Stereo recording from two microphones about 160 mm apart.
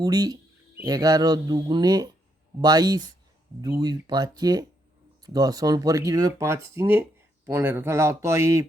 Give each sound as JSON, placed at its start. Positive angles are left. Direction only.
{"t": 0.0, "sound": "speech", "side_deg": -25}